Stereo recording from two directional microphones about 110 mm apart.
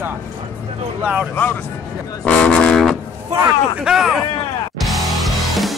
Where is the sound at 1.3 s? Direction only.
15° left (ahead or behind); by 4.2 s centre (ahead or behind).